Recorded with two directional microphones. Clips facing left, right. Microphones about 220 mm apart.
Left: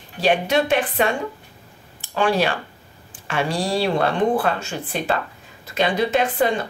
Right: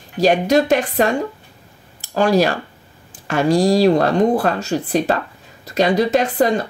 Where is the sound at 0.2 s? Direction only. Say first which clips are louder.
Right 5 dB; 40° right (ahead or behind).